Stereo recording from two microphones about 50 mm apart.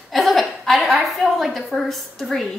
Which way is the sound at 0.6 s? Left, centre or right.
Centre.